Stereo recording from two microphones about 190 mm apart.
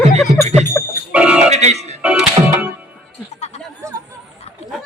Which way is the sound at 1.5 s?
35° right (ahead or behind).